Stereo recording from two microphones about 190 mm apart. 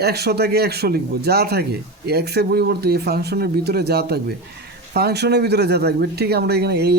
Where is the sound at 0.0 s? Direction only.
55° right (ahead or behind).